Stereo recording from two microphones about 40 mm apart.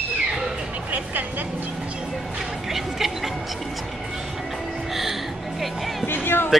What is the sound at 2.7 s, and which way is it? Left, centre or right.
Music, centre.